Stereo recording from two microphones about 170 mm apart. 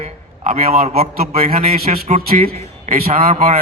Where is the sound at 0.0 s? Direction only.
40° right (ahead or behind).